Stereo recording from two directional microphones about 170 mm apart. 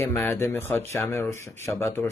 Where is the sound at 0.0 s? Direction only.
10° left (ahead or behind).